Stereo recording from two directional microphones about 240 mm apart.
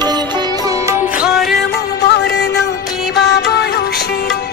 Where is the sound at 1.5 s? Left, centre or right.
Left.